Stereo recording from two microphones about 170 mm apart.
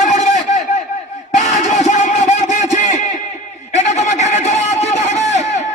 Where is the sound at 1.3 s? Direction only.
45° left (ahead or behind).